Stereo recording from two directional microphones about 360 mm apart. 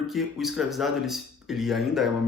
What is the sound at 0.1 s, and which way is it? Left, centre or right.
A man's voice, centre.